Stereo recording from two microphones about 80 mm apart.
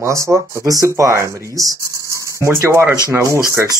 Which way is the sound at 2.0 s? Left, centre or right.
Right.